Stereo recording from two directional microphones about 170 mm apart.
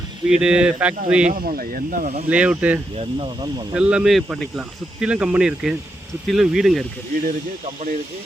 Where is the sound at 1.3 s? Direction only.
55° right (ahead or behind).